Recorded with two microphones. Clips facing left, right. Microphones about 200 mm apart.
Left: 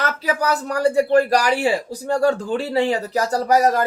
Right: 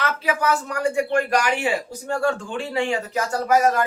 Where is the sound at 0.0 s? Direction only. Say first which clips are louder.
Left 1 dB; 40° left (ahead or behind).